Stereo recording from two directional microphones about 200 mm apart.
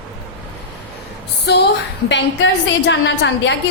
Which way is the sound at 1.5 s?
60° left (ahead or behind).